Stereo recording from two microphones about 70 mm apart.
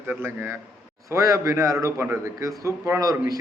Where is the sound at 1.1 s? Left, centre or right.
Right.